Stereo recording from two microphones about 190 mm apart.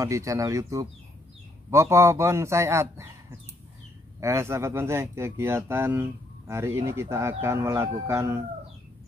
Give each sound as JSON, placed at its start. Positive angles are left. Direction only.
{"t": 0.0, "sound": "speech", "side_deg": -15}
{"t": 4.2, "sound": "speech", "side_deg": -15}